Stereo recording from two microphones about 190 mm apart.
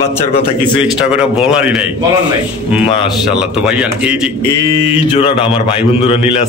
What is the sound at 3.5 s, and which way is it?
Speech, 5° right (ahead or behind).